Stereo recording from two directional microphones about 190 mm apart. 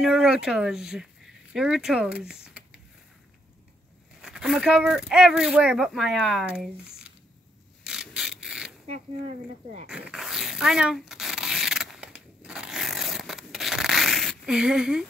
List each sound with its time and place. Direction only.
0.0 s speech: 5° right (ahead or behind)
4.2 s speech: 5° right (ahead or behind)
7.8 s mechanisms: 5° right (ahead or behind)
8.8 s speech: 35° right (ahead or behind)
9.8 s a sound: 5° right (ahead or behind)